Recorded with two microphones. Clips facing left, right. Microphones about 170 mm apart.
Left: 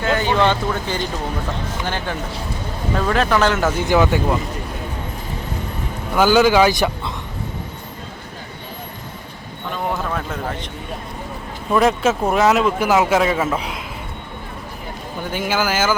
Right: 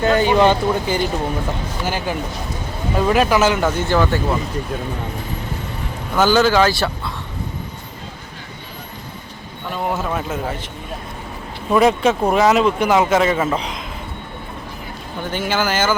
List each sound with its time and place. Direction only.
0.0 s speech: 15° right (ahead or behind); by 4.4 s 15° left (ahead or behind)
6.1 s speech: 10° left (ahead or behind)
9.9 s a man's voice: 10° right (ahead or behind)
11.7 s speech: centre (ahead or behind)
15.3 s speech: 10° left (ahead or behind)